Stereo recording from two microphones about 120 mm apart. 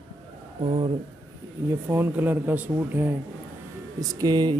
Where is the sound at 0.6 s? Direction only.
50° right (ahead or behind).